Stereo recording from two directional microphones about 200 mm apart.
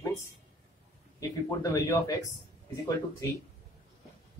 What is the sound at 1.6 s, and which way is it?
Speech, 15° left (ahead or behind).